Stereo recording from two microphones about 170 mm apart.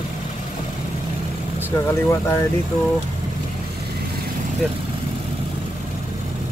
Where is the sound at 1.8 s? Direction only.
15° left (ahead or behind).